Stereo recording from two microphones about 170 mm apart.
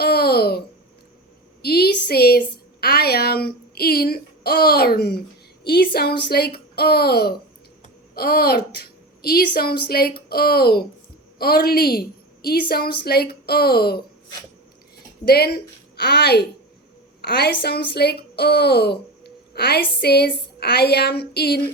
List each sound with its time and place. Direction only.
0.0 s babbling: 65° left (ahead or behind)
1.6 s a woman's voice: 65° left (ahead or behind)
15.2 s a woman's voice: 65° left (ahead or behind)